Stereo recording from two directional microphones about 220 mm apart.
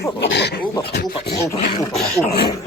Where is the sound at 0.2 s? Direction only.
50° left (ahead or behind).